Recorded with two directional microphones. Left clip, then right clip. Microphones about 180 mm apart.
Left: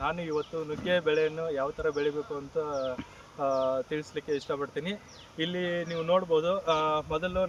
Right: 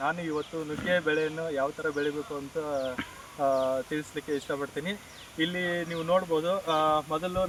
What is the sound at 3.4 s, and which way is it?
Speech, 25° left (ahead or behind).